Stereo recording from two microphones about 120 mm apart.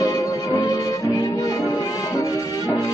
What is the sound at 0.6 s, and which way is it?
Music, 30° left (ahead or behind).